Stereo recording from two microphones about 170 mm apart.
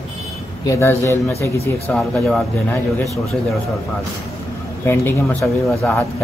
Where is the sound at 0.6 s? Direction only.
15° left (ahead or behind).